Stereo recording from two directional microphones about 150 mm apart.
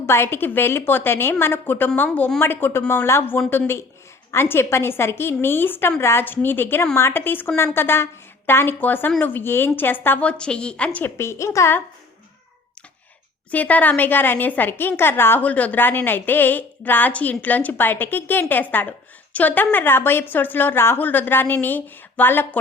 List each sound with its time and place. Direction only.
0.0 s a woman's voice: 15° left (ahead or behind)
13.5 s a woman's voice: 10° left (ahead or behind)